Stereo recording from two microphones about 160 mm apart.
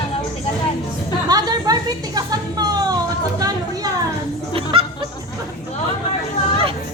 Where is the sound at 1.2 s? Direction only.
25° right (ahead or behind).